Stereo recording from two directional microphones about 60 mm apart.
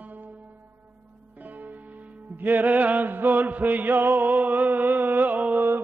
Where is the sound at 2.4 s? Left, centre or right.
Right.